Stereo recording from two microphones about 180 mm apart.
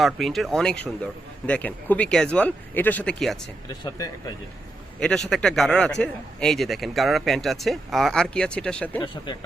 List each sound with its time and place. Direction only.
0.0 s speech: centre (ahead or behind)
3.7 s speech: 20° left (ahead or behind)
4.9 s speech: 5° left (ahead or behind)